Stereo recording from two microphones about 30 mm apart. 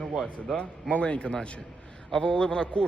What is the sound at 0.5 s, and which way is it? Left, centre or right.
A man's voice, left.